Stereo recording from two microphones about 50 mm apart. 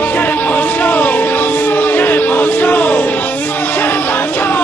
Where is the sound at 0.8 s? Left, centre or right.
Left.